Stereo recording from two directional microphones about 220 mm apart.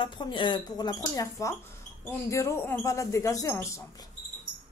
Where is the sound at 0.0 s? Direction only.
20° left (ahead or behind).